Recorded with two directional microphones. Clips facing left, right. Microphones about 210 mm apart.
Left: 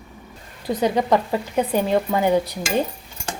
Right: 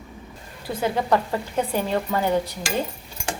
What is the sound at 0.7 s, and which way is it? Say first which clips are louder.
A woman's voice: left 3 dB; 20° left (ahead or behind).